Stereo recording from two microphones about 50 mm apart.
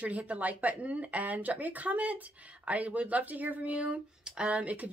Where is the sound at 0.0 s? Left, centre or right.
Right.